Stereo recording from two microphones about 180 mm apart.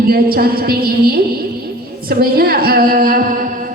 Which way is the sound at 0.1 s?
55° right (ahead or behind).